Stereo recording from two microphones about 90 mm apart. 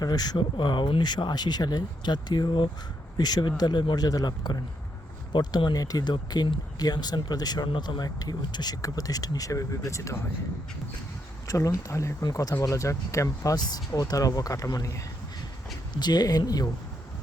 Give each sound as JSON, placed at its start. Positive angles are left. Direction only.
{"t": 0.0, "sound": "speech", "side_deg": 45}
{"t": 0.3, "sound": "speech", "side_deg": 60}
{"t": 3.2, "sound": "speech", "side_deg": 50}
{"t": 3.6, "sound": "speech", "side_deg": 60}
{"t": 11.4, "sound": "speech", "side_deg": 40}
{"t": 16.0, "sound": "speech", "side_deg": 50}